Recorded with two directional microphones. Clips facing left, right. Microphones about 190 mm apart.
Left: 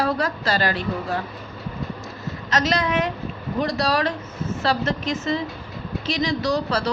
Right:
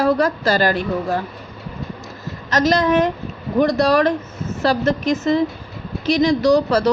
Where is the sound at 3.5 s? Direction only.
50° right (ahead or behind).